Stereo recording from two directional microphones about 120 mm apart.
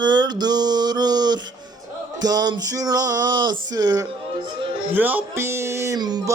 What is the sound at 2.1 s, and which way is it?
Music, 35° right (ahead or behind).